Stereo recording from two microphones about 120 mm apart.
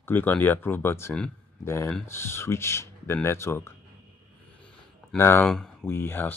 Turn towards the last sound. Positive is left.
turn(degrees=15)  # may be behind; listen again after turning